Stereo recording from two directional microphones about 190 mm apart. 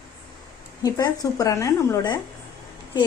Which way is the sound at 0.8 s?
20° left (ahead or behind).